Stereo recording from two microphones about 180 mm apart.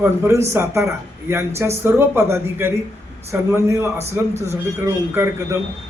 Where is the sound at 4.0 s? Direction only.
40° right (ahead or behind).